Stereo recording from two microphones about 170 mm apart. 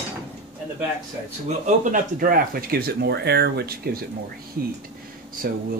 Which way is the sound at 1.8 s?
55° right (ahead or behind).